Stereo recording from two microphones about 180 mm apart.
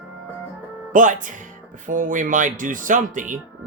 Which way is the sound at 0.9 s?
45° right (ahead or behind).